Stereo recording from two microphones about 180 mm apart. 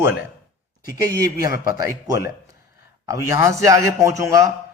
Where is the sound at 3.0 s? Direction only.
15° right (ahead or behind).